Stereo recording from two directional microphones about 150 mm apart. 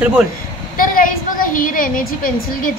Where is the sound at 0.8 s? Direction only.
65° left (ahead or behind).